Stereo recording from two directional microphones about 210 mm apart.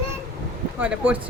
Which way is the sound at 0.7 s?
5° right (ahead or behind).